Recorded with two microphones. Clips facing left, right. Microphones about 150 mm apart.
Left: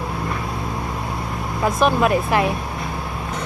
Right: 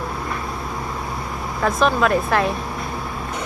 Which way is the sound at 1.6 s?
20° left (ahead or behind).